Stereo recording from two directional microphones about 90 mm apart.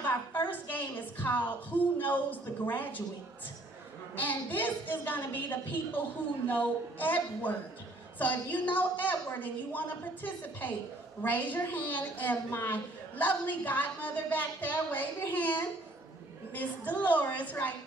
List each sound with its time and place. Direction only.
0.0 s a woman's voice: 20° left (ahead or behind)
4.1 s a woman's voice: 20° left (ahead or behind)